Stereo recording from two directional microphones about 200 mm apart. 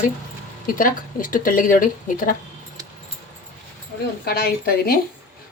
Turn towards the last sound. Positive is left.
turn(degrees=50)  # may be behind; listen again after turning